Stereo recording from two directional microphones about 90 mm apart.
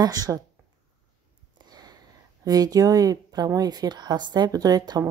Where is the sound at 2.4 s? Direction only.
45° right (ahead or behind).